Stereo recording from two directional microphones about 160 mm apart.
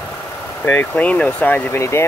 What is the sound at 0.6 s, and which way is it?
Speech, 10° left (ahead or behind).